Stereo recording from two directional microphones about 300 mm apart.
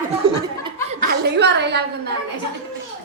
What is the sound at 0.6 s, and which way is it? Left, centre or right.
Speech, right.